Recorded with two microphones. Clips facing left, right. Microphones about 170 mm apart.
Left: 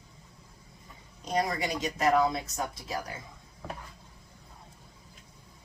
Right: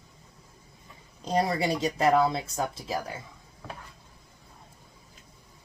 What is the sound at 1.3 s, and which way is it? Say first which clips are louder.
Speech: right 4 dB; 30° right (ahead or behind).